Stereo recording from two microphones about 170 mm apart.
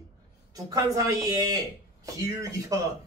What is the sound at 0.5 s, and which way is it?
Speech, 20° right (ahead or behind).